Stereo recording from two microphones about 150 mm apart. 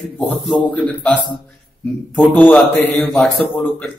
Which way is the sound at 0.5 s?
5° left (ahead or behind).